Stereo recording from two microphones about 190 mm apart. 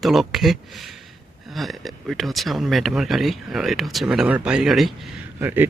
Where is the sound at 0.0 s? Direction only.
Centre (ahead or behind).